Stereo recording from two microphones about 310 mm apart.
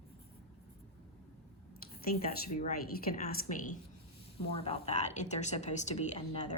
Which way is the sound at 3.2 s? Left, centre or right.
Left.